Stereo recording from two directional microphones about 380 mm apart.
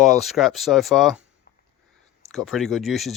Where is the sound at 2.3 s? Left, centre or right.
Centre.